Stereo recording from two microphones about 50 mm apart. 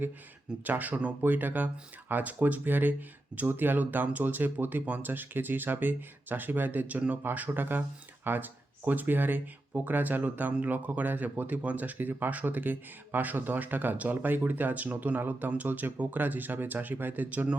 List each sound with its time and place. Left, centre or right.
0.6 s speech: right
1.2 s speech: right